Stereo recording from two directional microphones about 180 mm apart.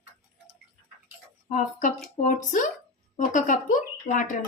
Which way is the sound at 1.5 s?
45° left (ahead or behind).